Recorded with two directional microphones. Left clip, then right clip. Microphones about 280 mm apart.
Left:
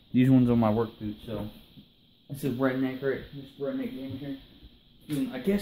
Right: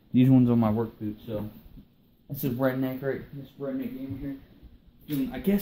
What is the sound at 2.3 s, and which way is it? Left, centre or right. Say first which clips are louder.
Speech: right 1 dB; centre.